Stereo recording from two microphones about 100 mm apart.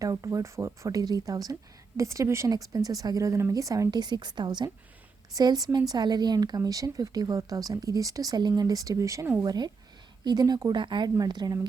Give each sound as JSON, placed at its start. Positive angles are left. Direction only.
{"t": 0.0, "sound": "a woman's voice", "side_deg": -35}